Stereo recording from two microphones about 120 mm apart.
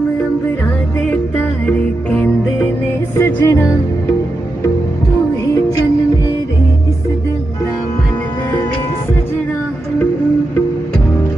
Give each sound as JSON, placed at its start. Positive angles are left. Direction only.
{"t": 1.7, "sound": "music", "side_deg": 10}